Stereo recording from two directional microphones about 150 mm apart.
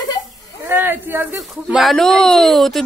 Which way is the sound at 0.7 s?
15° right (ahead or behind).